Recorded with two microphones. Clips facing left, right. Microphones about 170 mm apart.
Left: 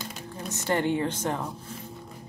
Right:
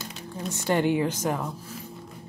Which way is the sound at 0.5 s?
15° right (ahead or behind).